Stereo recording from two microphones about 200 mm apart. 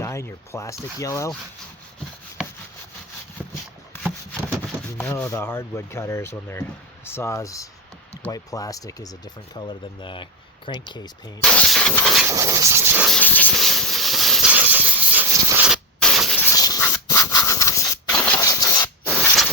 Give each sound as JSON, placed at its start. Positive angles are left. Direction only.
{"t": 0.0, "sound": "speech", "side_deg": 15}
{"t": 4.9, "sound": "speech", "side_deg": 10}
{"t": 11.4, "sound": "a sound", "side_deg": 5}
{"t": 12.3, "sound": "hiss", "side_deg": -15}
{"t": 13.1, "sound": "a sound", "side_deg": 5}
{"t": 16.4, "sound": "scratch", "side_deg": 15}